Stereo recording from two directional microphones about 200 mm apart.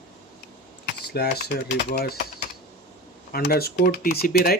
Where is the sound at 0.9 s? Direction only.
55° left (ahead or behind).